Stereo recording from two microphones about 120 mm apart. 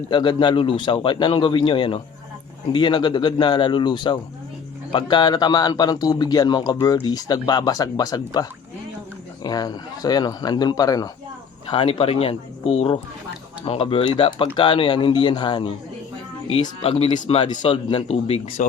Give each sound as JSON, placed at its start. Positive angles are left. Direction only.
{"t": 0.1, "sound": "a man's voice", "side_deg": 40}
{"t": 11.7, "sound": "speech", "side_deg": 45}
{"t": 17.2, "sound": "speech", "side_deg": 55}